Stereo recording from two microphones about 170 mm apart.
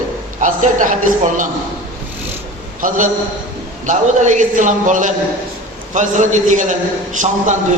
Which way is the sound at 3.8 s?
45° right (ahead or behind).